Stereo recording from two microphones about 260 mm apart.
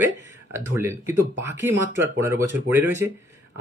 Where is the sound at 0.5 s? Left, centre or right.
Centre.